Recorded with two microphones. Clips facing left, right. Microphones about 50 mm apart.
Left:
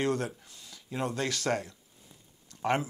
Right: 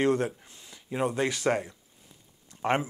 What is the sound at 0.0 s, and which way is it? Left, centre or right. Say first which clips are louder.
Speech: right 5 dB; right.